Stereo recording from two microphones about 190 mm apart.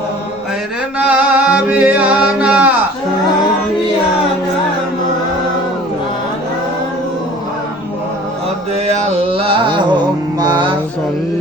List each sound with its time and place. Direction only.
0.9 s music: 5° right (ahead or behind)
8.9 s music: 30° right (ahead or behind)